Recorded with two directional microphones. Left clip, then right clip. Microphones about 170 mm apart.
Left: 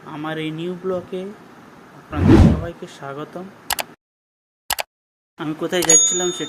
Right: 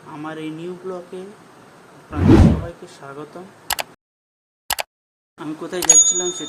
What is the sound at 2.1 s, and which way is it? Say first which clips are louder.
Whoosh: even; centre (ahead or behind).